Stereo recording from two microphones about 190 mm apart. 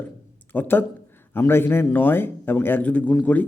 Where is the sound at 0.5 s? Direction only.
10° left (ahead or behind).